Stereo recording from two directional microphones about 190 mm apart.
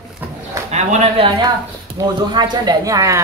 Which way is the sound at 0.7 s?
35° right (ahead or behind).